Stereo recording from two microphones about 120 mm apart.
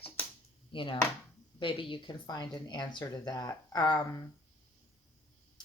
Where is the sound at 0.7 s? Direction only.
45° left (ahead or behind).